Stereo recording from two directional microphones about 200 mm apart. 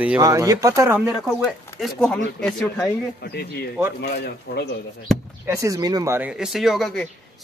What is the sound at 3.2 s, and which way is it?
A man's voice, 55° left (ahead or behind).